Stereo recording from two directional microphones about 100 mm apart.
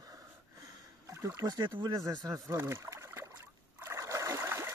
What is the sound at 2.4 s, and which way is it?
Trickle, 25° right (ahead or behind).